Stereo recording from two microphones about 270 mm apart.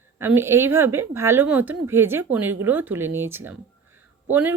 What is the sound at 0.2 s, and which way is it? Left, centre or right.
Speech, centre.